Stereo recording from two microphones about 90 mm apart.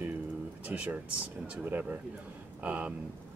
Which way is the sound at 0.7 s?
20° right (ahead or behind).